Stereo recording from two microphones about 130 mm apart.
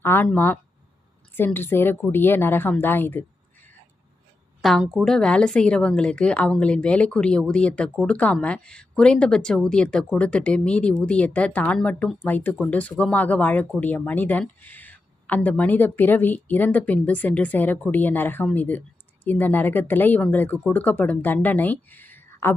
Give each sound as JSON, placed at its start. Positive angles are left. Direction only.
{"t": 0.0, "sound": "a woman's voice", "side_deg": 15}
{"t": 4.6, "sound": "a woman's voice", "side_deg": 0}